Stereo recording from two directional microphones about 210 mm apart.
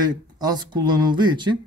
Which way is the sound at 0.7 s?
20° right (ahead or behind).